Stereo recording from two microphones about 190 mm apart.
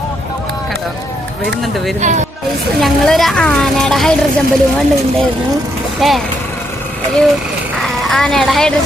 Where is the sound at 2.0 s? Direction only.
40° right (ahead or behind).